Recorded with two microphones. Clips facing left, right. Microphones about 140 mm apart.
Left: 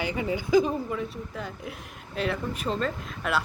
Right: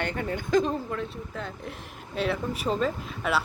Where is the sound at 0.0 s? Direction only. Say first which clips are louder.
Left 1 dB; 5° left (ahead or behind).